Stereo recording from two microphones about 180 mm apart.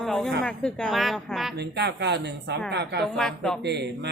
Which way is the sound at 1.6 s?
70° right (ahead or behind).